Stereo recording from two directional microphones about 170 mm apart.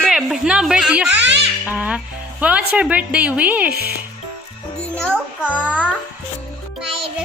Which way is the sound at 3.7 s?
65° right (ahead or behind).